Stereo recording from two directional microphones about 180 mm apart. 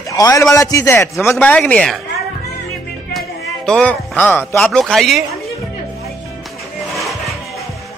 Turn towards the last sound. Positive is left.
turn(degrees=0)  # may be behind; listen again after turning